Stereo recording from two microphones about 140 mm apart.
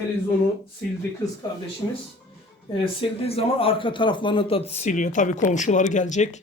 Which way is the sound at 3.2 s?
45° left (ahead or behind).